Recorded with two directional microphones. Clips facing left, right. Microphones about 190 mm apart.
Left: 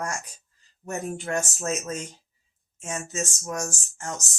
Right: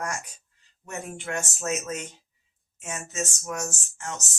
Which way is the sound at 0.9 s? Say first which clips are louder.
Left 4 dB; 35° left (ahead or behind).